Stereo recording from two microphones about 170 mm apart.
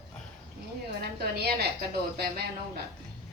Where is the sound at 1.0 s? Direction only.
70° right (ahead or behind).